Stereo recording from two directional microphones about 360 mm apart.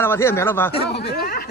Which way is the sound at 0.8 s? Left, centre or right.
Left.